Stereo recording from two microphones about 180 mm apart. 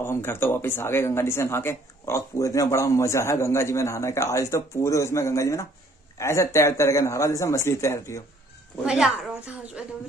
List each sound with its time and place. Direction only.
0.0 s speech: 15° left (ahead or behind)
8.8 s a woman's voice: 5° right (ahead or behind)